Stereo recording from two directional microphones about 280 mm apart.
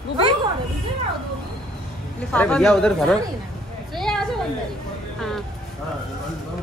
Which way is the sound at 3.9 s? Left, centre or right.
Centre.